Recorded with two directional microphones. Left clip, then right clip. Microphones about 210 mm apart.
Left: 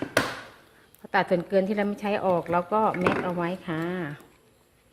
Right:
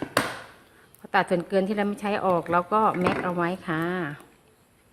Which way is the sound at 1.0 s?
5° right (ahead or behind).